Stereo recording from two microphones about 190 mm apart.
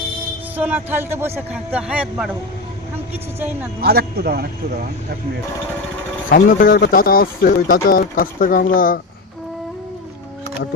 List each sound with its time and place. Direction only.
0.5 s speech: 10° right (ahead or behind)
3.8 s speech: 55° right (ahead or behind)
6.3 s speech: 50° left (ahead or behind)